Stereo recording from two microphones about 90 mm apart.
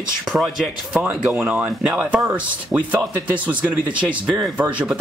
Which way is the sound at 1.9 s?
5° right (ahead or behind).